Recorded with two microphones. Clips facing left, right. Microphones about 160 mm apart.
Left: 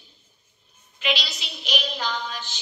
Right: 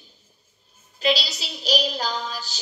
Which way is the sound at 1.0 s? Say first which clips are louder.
Right 5 dB; 35° right (ahead or behind).